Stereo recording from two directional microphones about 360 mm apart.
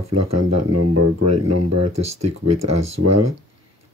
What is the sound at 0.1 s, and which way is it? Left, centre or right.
Speech, right.